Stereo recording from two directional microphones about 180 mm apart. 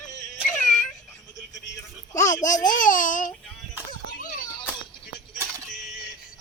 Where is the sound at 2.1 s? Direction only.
45° left (ahead or behind).